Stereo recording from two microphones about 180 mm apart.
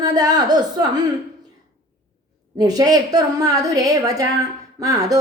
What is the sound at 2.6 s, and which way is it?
A woman's voice, 20° right (ahead or behind).